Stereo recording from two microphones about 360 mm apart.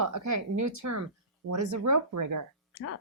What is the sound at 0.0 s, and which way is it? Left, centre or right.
Speech, right.